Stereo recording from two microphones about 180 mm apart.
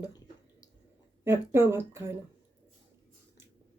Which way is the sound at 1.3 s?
15° right (ahead or behind).